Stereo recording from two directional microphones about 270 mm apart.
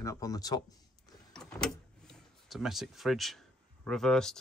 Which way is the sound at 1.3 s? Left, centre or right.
Centre.